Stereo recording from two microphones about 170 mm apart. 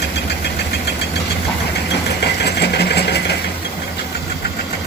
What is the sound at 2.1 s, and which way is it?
Engine, 75° left (ahead or behind).